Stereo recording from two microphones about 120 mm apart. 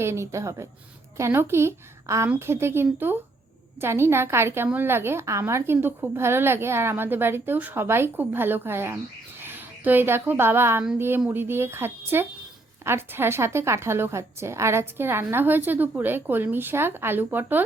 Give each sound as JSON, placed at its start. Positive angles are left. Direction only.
{"t": 0.0, "sound": "a woman's voice", "side_deg": -20}